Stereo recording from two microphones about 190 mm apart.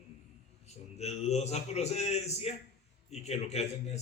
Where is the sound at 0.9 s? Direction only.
35° left (ahead or behind).